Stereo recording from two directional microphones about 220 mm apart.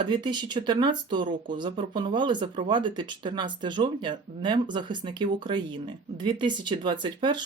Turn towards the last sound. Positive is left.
turn(degrees=-20)  # may be behind; listen again after turning